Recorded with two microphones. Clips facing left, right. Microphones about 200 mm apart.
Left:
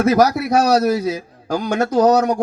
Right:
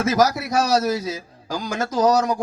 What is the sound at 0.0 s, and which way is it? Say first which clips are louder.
Speech: left 5 dB; 60° left (ahead or behind).